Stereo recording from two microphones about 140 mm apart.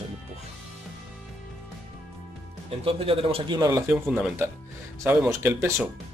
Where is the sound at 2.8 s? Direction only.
40° right (ahead or behind).